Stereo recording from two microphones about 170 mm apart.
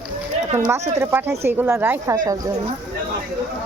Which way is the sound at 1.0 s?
15° right (ahead or behind).